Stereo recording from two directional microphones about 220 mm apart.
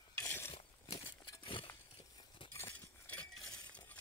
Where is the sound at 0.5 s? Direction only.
25° left (ahead or behind).